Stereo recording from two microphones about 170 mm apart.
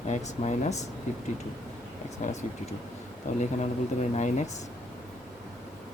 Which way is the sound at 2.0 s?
40° left (ahead or behind).